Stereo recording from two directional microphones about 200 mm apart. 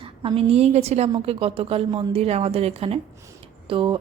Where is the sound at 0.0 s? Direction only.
25° right (ahead or behind).